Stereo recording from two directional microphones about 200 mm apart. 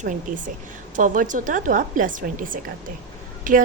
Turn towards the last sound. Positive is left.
turn(degrees=-40)  # may be behind; listen again after turning